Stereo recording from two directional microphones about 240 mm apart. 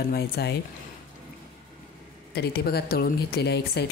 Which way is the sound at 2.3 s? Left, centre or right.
Left.